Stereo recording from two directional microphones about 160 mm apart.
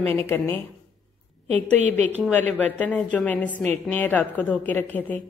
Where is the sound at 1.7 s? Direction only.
45° right (ahead or behind).